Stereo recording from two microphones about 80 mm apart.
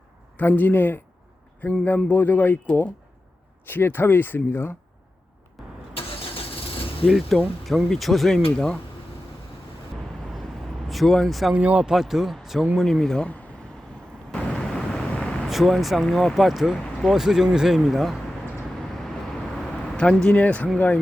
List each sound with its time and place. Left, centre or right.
0.3 s speech: left
5.6 s vehicle: centre
7.1 s speech: centre
10.8 s speech: centre
11.5 s speech: centre
11.9 s speech: centre
14.3 s vehicle: centre
15.4 s speech: centre
19.9 s speech: centre